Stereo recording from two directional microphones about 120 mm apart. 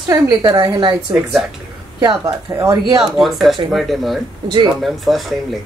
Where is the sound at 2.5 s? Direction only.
25° right (ahead or behind).